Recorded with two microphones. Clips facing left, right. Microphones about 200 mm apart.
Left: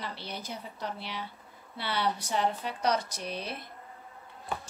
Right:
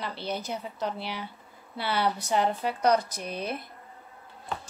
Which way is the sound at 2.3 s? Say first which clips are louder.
Right 4 dB; 55° right (ahead or behind).